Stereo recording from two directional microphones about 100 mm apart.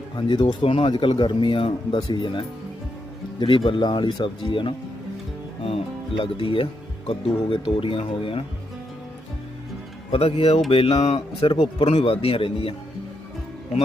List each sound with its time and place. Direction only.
0.2 s speech: 50° left (ahead or behind)
5.6 s speech: 70° left (ahead or behind)
10.1 s speech: 70° left (ahead or behind)